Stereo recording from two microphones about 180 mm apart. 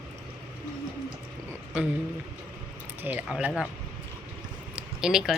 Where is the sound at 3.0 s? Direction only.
10° right (ahead or behind).